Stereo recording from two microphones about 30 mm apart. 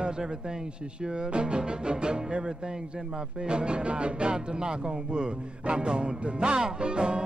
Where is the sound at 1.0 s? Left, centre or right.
Right.